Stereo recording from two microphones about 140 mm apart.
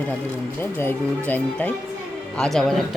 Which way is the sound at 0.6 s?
15° left (ahead or behind).